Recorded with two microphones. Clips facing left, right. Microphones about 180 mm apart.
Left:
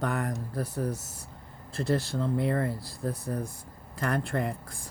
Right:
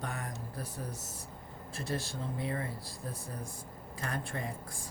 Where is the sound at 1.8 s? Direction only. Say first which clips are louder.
Left 9 dB; 65° left (ahead or behind).